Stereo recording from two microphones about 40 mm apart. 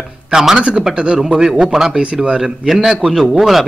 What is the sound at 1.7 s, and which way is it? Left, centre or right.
A man's voice, centre.